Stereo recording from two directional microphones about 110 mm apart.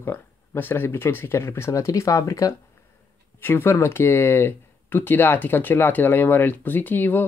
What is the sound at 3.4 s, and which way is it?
Speech, 20° left (ahead or behind).